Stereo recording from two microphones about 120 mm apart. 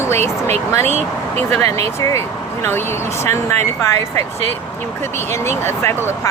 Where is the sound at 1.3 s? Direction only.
15° left (ahead or behind).